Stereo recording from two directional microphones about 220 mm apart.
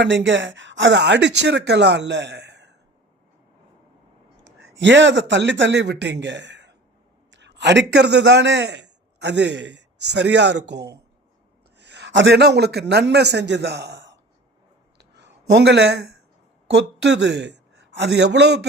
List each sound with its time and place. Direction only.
0.0 s speech: 55° right (ahead or behind)
4.7 s a man's voice: 55° right (ahead or behind)
14.9 s a sound: 50° right (ahead or behind)
16.6 s a man's voice: 55° right (ahead or behind)